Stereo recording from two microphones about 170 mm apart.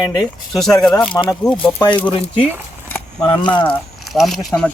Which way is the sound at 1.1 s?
30° left (ahead or behind).